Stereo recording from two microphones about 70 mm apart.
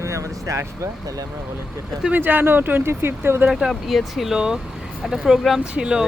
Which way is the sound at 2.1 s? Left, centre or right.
Right.